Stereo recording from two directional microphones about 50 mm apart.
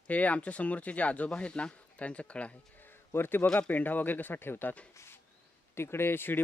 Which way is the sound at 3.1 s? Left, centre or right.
Left.